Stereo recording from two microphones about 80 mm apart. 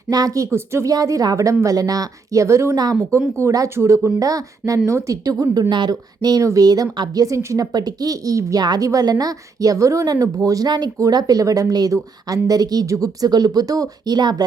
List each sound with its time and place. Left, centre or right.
0.1 s speech: right
0.5 s speech: right
0.9 s speech: right
2.7 s speech: right
3.4 s speech: right
5.6 s speech: right